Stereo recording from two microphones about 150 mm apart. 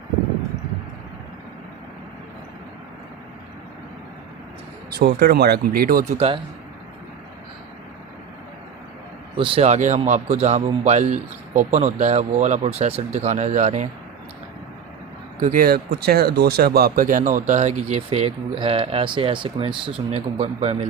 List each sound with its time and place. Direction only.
4.9 s speech: 90° right
6.1 s speech: 40° right (ahead or behind)
9.3 s speech: 35° right (ahead or behind); by 13.8 s 55° right (ahead or behind)
15.4 s speech: 60° right (ahead or behind); by 20.7 s 40° right (ahead or behind)